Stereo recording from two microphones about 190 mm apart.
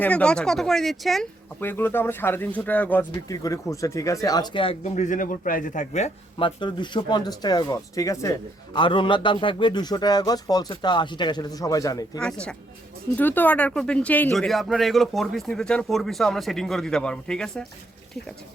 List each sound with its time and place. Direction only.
0.0 s speech: 5° left (ahead or behind); by 6.1 s 40° left (ahead or behind)
6.4 s speech: 25° left (ahead or behind)
12.2 s speech: 5° left (ahead or behind)